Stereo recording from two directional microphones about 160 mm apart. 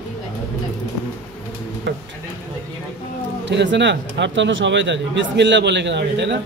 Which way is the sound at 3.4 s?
90° right.